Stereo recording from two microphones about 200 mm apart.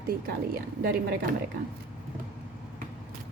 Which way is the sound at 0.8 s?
50° right (ahead or behind).